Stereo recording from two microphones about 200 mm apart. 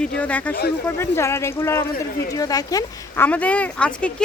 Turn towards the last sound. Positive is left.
turn(degrees=5)  # may be behind; listen again after turning